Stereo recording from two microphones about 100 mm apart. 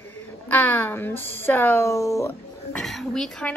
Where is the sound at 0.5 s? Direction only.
15° left (ahead or behind).